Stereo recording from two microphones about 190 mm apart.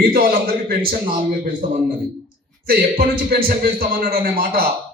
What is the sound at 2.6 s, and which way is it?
A man's voice, 50° right (ahead or behind).